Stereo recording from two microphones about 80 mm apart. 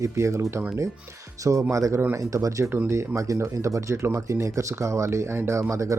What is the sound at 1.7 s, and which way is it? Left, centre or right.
Speech, right.